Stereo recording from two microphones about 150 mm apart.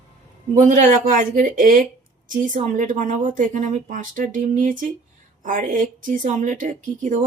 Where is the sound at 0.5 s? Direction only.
55° right (ahead or behind).